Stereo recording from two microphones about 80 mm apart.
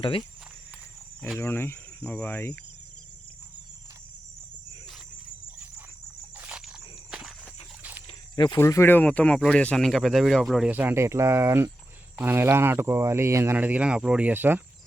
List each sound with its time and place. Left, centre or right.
1.4 s speech: left
2.1 s cricket: left
6.3 s a sound: centre
6.7 s walk: centre
8.5 s speech: left
8.9 s speech: centre
10.7 s speech: right
13.6 s speech: centre